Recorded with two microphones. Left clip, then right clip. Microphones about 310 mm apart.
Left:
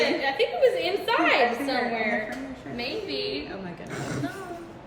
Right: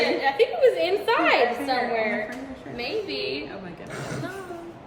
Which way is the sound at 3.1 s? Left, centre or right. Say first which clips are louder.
Right 1 dB; centre.